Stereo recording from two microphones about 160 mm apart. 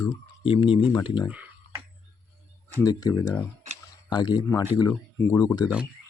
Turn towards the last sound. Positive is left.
turn(degrees=25)  # may be behind; listen again after turning